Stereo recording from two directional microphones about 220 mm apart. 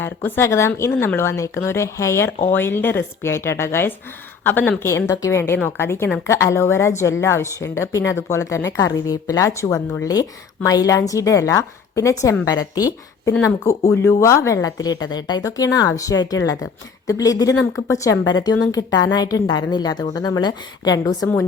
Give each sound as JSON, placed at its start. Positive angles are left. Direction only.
{"t": 0.0, "sound": "speech", "side_deg": 10}